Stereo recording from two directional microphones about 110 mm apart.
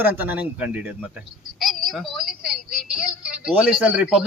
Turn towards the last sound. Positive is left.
turn(degrees=-10)  # may be behind; listen again after turning